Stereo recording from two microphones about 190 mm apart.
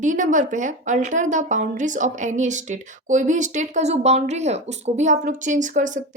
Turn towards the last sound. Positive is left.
turn(degrees=-40)  # may be behind; listen again after turning